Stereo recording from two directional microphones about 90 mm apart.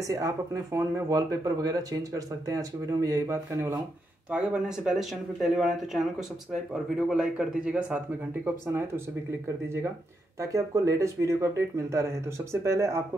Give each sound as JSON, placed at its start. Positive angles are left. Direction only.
{"t": 0.7, "sound": "speech", "side_deg": -35}
{"t": 4.3, "sound": "a man's voice", "side_deg": -5}
{"t": 8.5, "sound": "speech", "side_deg": -25}
{"t": 10.4, "sound": "speech", "side_deg": -35}